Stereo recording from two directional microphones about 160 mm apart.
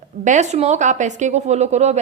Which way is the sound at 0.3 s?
45° right (ahead or behind).